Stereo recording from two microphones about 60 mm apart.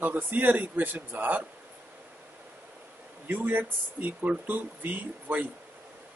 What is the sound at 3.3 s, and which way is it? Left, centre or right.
Speech, right.